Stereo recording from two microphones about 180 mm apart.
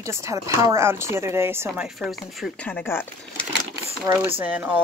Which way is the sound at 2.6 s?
10° left (ahead or behind).